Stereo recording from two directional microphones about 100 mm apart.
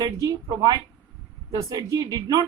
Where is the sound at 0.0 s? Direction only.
35° right (ahead or behind).